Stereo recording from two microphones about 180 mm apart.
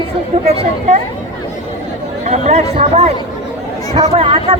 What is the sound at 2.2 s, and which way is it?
Speech, 40° right (ahead or behind).